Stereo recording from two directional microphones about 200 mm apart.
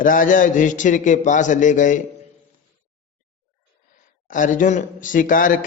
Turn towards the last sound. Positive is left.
turn(degrees=45)  # may be behind; listen again after turning